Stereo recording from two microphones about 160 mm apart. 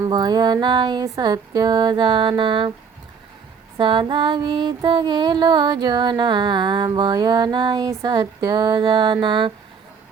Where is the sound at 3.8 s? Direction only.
30° right (ahead or behind).